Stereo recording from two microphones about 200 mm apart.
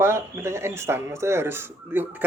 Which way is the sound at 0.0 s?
15° right (ahead or behind).